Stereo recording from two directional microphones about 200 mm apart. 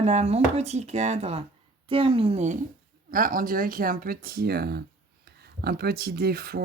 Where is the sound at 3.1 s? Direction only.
45° right (ahead or behind).